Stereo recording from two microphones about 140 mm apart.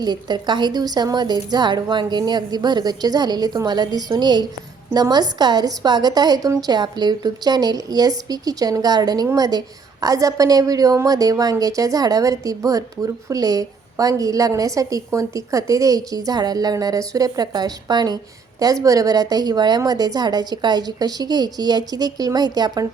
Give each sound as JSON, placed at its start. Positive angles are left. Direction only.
{"t": 0.0, "sound": "a woman's voice", "side_deg": -30}